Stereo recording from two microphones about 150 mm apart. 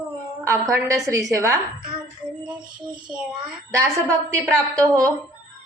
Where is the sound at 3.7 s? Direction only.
20° right (ahead or behind).